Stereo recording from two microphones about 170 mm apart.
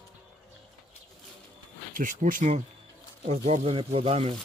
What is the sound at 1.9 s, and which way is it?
Speech, 50° right (ahead or behind).